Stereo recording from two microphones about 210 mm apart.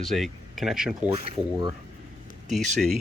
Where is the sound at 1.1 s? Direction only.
25° right (ahead or behind).